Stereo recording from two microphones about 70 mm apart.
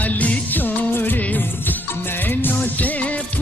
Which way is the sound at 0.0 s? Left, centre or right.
Left.